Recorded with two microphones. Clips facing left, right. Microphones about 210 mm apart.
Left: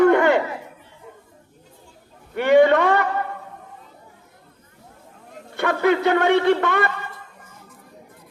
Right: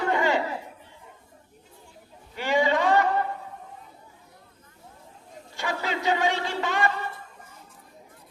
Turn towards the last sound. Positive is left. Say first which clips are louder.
# left 8 dB
turn(degrees=60)  # may be behind; listen again after turning